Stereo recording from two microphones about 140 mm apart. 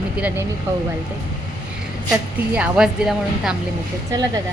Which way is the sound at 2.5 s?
5° right (ahead or behind).